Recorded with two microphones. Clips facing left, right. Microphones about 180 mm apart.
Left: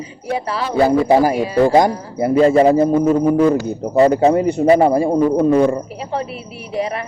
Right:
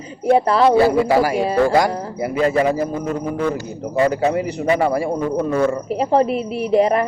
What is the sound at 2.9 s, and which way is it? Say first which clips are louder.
Speech: left 9 dB; 45° left (ahead or behind).